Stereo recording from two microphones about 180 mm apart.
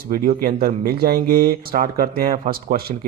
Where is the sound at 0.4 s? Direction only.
55° right (ahead or behind).